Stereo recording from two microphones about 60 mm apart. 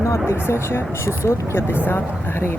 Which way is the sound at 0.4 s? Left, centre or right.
Left.